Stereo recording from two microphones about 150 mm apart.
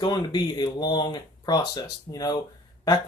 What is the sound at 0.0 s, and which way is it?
Speech, 30° left (ahead or behind).